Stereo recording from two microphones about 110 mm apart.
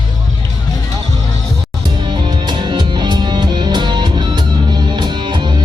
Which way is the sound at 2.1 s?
40° right (ahead or behind).